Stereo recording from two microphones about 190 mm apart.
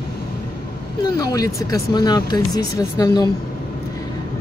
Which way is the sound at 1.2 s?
20° left (ahead or behind).